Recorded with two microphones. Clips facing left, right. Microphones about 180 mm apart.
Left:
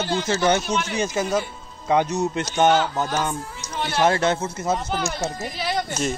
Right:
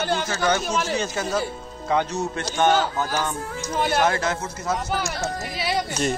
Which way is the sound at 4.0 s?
25° left (ahead or behind).